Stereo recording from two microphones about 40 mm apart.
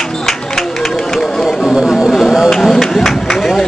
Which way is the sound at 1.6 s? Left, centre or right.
Centre.